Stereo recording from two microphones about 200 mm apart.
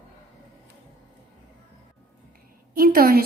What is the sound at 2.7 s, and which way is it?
Speech, 45° right (ahead or behind).